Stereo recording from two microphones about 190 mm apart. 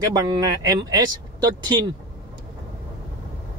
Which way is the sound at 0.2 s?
20° right (ahead or behind).